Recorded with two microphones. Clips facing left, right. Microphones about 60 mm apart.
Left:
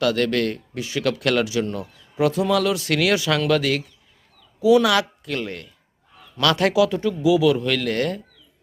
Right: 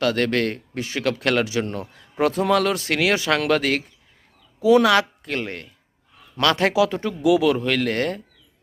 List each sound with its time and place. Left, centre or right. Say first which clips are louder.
0.0 s speech: even; right
1.6 s speech: left 1 dB; right
4.9 s speech: right 2 dB; right
7.2 s speech: even; right
7.5 s speech: even; right